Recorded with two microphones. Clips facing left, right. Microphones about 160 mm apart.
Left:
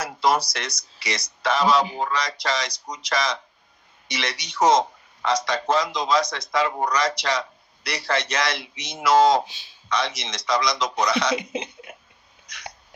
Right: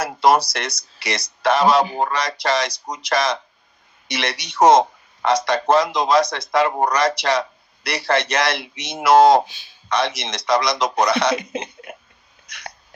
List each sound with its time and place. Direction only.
0.0 s a sound: 60° right (ahead or behind)
0.8 s speech: 60° right (ahead or behind)
12.5 s hiccup: 60° right (ahead or behind)